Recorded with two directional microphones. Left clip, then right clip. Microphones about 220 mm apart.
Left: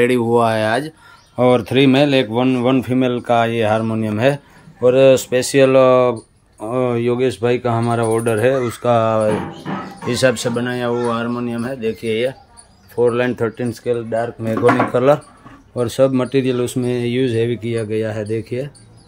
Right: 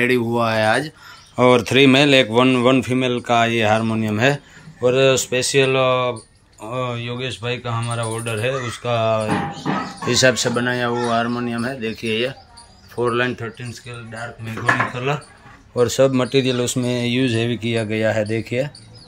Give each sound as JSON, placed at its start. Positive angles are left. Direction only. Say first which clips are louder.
{"t": 0.0, "sound": "speech", "louder": "left 4 dB", "side_deg": 10}
{"t": 15.7, "sound": "speech", "louder": "even", "side_deg": 10}